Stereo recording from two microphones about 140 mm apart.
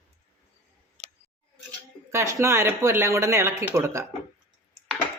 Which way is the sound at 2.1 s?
20° right (ahead or behind).